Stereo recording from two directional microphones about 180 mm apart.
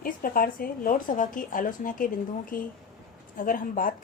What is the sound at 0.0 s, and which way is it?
A woman's voice, 50° left (ahead or behind).